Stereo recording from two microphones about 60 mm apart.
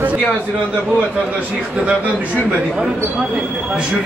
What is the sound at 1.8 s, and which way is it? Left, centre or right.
A man's voice, centre.